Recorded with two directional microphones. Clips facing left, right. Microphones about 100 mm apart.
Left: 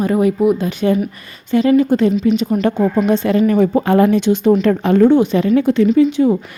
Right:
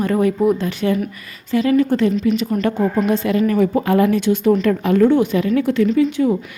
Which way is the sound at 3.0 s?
25° left (ahead or behind).